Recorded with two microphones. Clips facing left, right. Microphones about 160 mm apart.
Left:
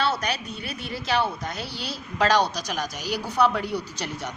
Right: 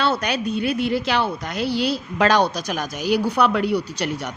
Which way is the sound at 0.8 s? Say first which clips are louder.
Right 5 dB; 85° right.